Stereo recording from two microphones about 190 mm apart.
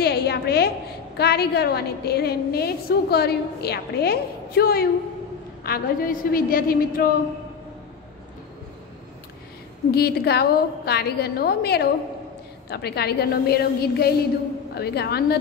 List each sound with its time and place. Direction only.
0.0 s a sound: 60° left (ahead or behind)
1.1 s a woman's voice: 60° left (ahead or behind)
9.8 s a woman's voice: 55° left (ahead or behind)